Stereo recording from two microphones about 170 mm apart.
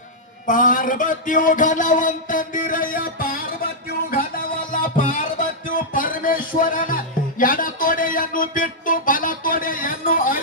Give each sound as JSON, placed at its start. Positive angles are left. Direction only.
{"t": 0.4, "sound": "speech", "side_deg": 50}
{"t": 4.1, "sound": "music", "side_deg": 60}